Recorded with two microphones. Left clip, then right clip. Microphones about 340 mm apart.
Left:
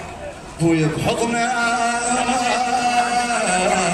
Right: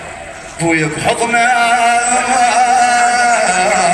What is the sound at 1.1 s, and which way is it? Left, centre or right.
Speech, right.